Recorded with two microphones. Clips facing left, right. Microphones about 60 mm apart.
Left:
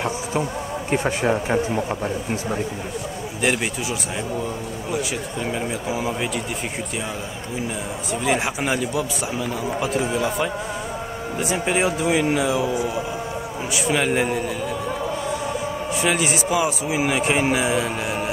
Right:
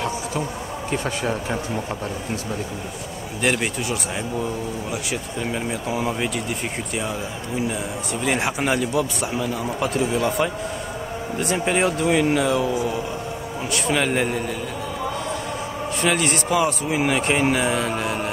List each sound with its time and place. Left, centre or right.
0.8 s speech: left
4.9 s a man's voice: centre
8.1 s a man's voice: centre
16.0 s a man's voice: centre